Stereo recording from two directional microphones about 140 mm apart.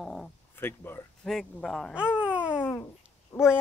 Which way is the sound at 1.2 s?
5° left (ahead or behind).